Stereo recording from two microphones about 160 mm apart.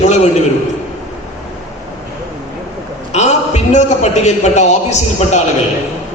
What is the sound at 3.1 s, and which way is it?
A man's voice, 45° left (ahead or behind).